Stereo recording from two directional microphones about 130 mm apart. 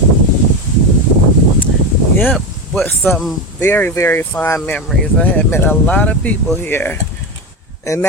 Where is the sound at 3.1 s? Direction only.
Centre (ahead or behind).